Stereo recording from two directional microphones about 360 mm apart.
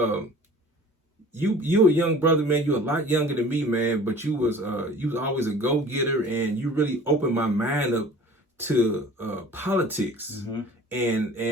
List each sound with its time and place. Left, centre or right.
1.3 s a man's voice: centre